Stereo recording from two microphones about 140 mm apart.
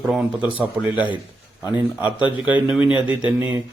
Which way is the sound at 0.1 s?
10° right (ahead or behind).